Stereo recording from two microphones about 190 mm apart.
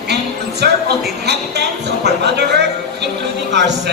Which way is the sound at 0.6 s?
60° right (ahead or behind).